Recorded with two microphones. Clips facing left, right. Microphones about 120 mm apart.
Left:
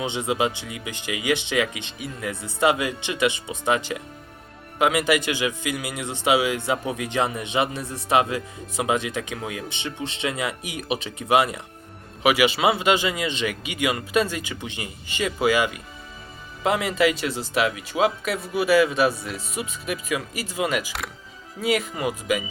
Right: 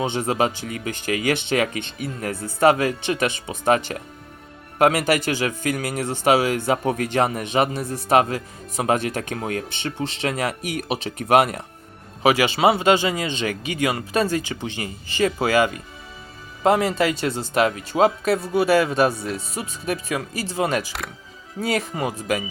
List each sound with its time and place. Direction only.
0.0 s a man's voice: 45° right (ahead or behind)
12.2 s speech: 30° right (ahead or behind)